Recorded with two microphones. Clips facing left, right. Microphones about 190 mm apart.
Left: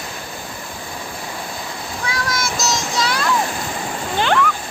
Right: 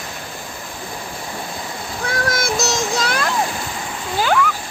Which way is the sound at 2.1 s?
55° right (ahead or behind).